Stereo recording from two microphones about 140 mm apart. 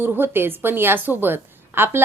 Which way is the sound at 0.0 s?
15° right (ahead or behind).